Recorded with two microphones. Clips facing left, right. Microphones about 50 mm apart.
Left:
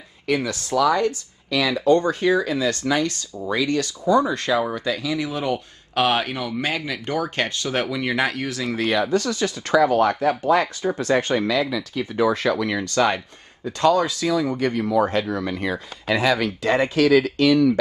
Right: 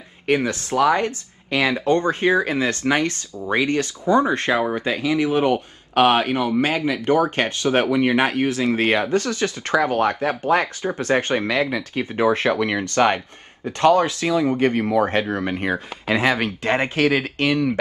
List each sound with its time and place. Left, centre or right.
0.3 s speech: right